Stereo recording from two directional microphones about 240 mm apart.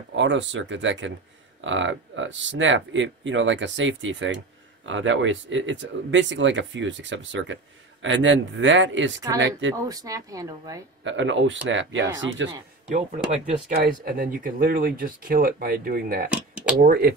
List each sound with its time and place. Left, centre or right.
0.1 s speech: right
9.8 s speech: centre
11.1 s speech: right
13.5 s speech: right